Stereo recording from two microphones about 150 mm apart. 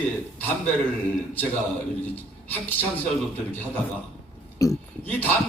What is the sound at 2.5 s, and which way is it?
Speech, 10° left (ahead or behind).